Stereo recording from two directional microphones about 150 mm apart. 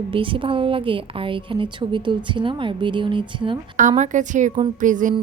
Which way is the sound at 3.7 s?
55° right (ahead or behind).